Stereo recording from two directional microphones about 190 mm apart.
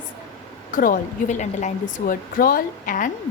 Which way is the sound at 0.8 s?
45° left (ahead or behind).